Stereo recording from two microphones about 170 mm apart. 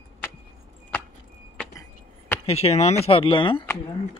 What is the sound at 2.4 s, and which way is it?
Speech, 35° left (ahead or behind).